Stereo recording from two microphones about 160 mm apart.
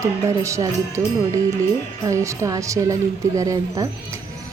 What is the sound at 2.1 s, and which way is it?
A woman's voice, 20° right (ahead or behind).